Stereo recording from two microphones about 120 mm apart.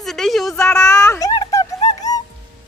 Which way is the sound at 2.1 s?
30° left (ahead or behind).